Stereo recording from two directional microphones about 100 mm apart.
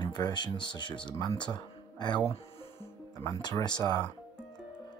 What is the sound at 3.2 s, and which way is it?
Speech, 35° left (ahead or behind).